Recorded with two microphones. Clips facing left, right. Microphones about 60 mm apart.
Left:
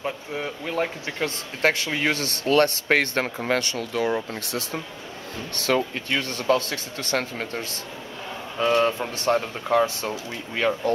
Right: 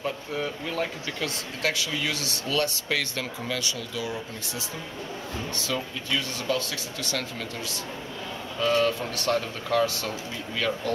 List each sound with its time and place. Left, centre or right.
0.0 s speech: centre
1.6 s speech: left
5.8 s speech: left